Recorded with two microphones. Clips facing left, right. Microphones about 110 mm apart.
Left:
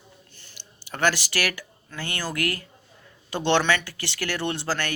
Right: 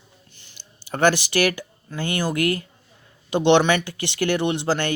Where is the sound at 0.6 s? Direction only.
30° right (ahead or behind).